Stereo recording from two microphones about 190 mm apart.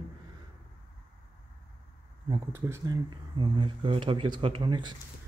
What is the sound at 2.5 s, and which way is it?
Speech, 15° right (ahead or behind).